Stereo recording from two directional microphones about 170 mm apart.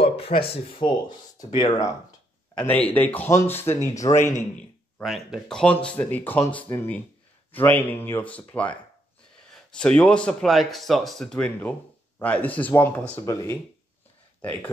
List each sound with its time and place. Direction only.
0.0 s speech: 35° left (ahead or behind)
2.5 s speech: 10° left (ahead or behind)
4.9 s speech: centre (ahead or behind)
9.8 s speech: 5° left (ahead or behind)